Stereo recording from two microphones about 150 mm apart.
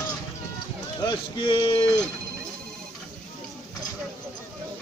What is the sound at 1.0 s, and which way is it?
Speech, 30° left (ahead or behind).